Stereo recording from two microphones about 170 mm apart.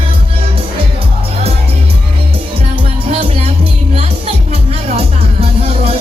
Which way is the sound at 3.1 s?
35° right (ahead or behind).